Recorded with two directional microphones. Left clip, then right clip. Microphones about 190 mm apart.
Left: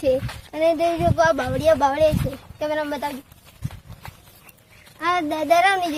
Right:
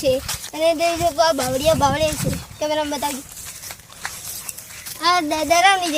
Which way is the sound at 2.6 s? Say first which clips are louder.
Right 3 dB; 15° right (ahead or behind).